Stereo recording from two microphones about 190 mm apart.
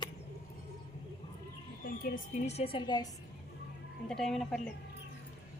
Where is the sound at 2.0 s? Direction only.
50° left (ahead or behind).